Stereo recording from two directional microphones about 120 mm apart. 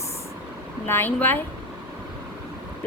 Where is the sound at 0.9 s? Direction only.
20° left (ahead or behind).